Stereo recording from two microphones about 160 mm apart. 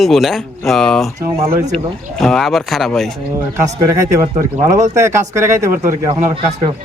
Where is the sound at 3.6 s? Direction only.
20° right (ahead or behind).